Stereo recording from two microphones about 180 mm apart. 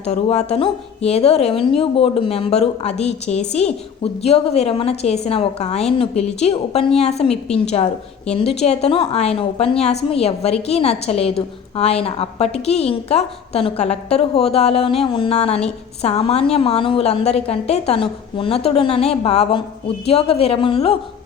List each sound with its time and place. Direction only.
0.0 s speech: 35° left (ahead or behind)